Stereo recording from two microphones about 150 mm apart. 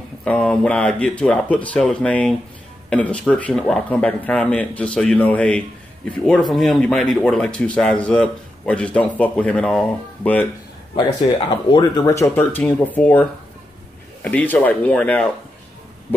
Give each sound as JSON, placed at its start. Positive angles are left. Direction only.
{"t": 0.2, "sound": "speech", "side_deg": 5}
{"t": 11.0, "sound": "speech", "side_deg": 30}